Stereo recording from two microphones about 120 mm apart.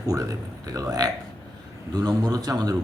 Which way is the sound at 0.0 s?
30° right (ahead or behind).